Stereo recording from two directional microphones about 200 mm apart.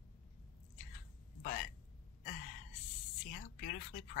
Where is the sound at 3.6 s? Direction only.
40° left (ahead or behind).